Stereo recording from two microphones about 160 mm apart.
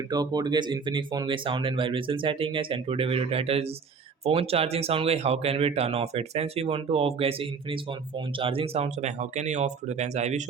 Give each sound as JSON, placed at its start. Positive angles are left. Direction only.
{"t": 0.1, "sound": "speech", "side_deg": -25}